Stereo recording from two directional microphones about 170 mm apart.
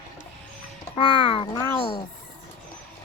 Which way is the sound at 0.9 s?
30° left (ahead or behind).